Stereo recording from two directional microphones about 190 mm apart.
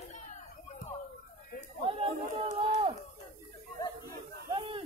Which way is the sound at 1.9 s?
30° right (ahead or behind).